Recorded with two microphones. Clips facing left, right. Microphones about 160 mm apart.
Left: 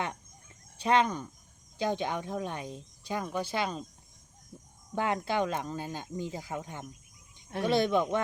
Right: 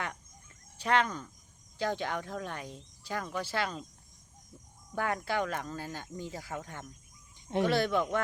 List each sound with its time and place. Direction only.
0.8 s speech: 20° left (ahead or behind)
4.9 s speech: 20° left (ahead or behind)